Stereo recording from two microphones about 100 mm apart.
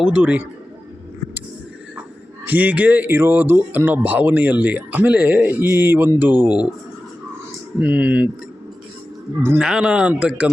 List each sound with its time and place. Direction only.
0.1 s a man's voice: 15° right (ahead or behind)
2.4 s a man's voice: 15° right (ahead or behind)
7.8 s a man's voice: 15° right (ahead or behind)
9.6 s a man's voice: 10° right (ahead or behind)